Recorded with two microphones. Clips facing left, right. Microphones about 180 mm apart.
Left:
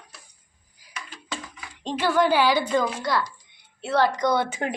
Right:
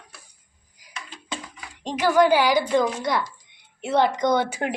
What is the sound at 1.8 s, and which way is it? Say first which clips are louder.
A woman's voice: right 3 dB; 10° right (ahead or behind).